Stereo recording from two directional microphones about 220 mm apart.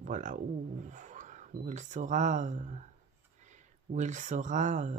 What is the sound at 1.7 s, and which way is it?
Speech, 35° right (ahead or behind).